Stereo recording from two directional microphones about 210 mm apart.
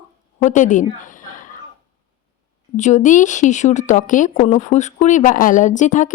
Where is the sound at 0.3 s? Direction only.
35° left (ahead or behind).